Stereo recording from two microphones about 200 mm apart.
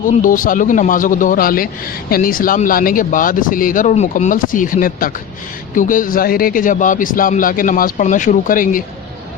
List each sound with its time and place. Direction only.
0.0 s a man's voice: 40° left (ahead or behind)